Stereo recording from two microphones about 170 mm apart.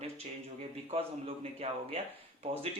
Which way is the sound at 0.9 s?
40° right (ahead or behind).